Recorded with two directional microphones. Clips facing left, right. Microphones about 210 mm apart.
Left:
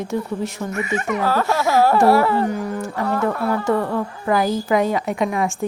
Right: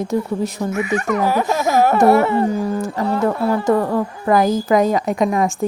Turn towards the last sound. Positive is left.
turn(degrees=-40)  # may be behind; listen again after turning